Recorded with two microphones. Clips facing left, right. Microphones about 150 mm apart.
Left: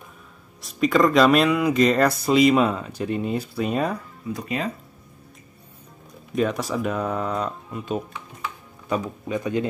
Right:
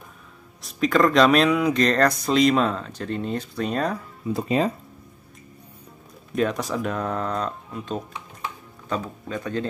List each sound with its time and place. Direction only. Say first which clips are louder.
0.6 s speech: left 1 dB; centre (ahead or behind)
4.3 s speech: right 5 dB; 30° right (ahead or behind)
6.3 s a man's voice: left 1 dB; centre (ahead or behind)